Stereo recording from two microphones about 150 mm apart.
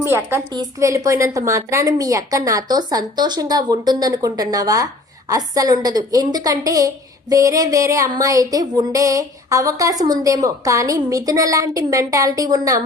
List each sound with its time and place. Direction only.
0.0 s a woman's voice: 15° right (ahead or behind)